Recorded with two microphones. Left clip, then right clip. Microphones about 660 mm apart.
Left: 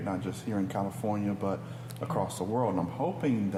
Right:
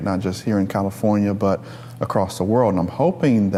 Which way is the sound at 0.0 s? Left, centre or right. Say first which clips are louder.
Right 11 dB; right.